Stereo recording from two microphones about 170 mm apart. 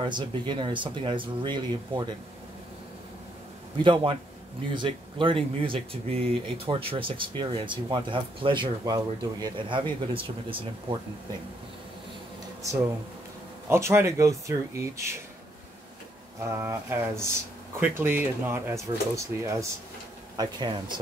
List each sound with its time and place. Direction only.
0.0 s speech: 25° right (ahead or behind)
3.8 s speech: 30° right (ahead or behind)
13.7 s speech: 15° right (ahead or behind)
16.5 s speech: 15° right (ahead or behind)